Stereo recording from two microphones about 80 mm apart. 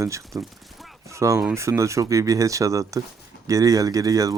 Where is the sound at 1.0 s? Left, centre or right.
Right.